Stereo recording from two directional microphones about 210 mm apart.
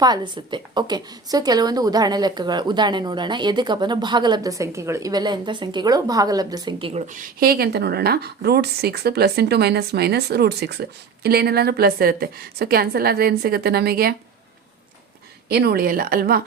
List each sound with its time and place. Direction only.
0.0 s a woman's voice: 20° right (ahead or behind)
7.1 s speech: 40° right (ahead or behind)
15.4 s speech: 50° right (ahead or behind)